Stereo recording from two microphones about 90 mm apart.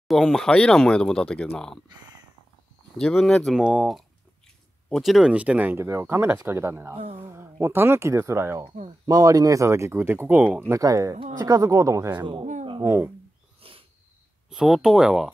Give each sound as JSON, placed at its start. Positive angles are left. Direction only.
{"t": 0.1, "sound": "speech", "side_deg": 0}
{"t": 1.9, "sound": "a sound", "side_deg": -50}
{"t": 3.0, "sound": "speech", "side_deg": 5}
{"t": 3.5, "sound": "speech", "side_deg": -10}
{"t": 5.3, "sound": "speech", "side_deg": -15}
{"t": 5.8, "sound": "speech", "side_deg": -30}
{"t": 9.0, "sound": "speech", "side_deg": -40}
{"t": 10.7, "sound": "speech", "side_deg": -40}
{"t": 12.3, "sound": "speech", "side_deg": -60}
{"t": 12.8, "sound": "speech", "side_deg": -25}
{"t": 13.6, "sound": "wheeze", "side_deg": -90}
{"t": 14.5, "sound": "speech", "side_deg": -5}